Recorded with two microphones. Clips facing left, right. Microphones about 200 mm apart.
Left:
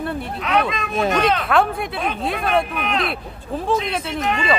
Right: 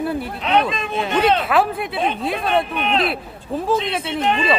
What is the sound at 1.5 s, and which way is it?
Speech, centre (ahead or behind).